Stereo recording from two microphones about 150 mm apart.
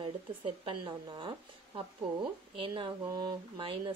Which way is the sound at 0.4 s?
35° right (ahead or behind).